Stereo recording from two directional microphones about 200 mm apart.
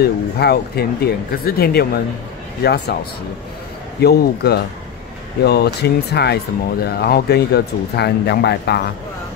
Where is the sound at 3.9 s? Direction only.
55° left (ahead or behind).